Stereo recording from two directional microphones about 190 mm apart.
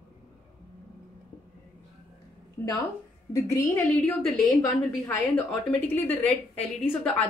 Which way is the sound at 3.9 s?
5° left (ahead or behind).